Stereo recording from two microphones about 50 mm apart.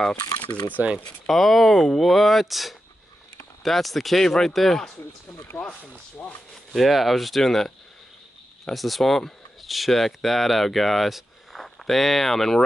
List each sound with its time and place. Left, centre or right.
0.8 s speech: right
1.2 s speech: centre
5.5 s speech: left
6.7 s speech: centre
8.7 s speech: centre